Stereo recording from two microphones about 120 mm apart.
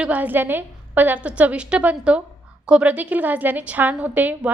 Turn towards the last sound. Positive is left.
turn(degrees=-15)  # may be behind; listen again after turning